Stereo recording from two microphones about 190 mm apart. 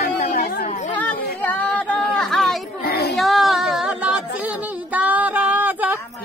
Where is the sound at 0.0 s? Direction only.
45° left (ahead or behind).